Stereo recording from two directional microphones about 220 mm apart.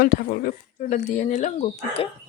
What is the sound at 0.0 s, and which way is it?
Speech, 40° left (ahead or behind).